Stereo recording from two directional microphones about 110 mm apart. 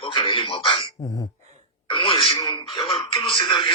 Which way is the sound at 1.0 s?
30° left (ahead or behind).